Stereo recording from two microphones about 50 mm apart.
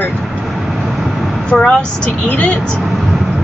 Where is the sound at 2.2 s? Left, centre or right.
Left.